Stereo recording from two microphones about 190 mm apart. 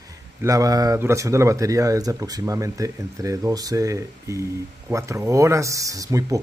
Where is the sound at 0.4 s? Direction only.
15° right (ahead or behind).